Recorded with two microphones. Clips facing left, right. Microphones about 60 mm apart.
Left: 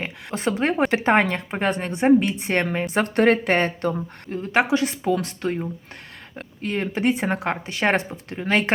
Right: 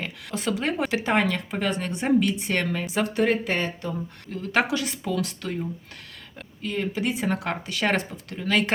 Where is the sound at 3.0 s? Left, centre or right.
Left.